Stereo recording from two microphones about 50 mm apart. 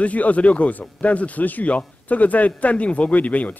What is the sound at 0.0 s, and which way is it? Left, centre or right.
A man's voice, left.